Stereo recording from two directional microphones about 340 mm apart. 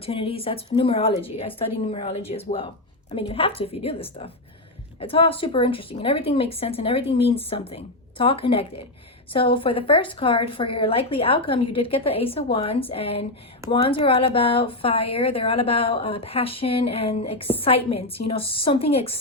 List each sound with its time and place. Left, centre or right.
0.0 s speech: centre